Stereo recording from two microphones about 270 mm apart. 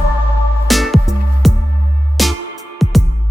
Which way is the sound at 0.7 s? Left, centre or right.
Centre.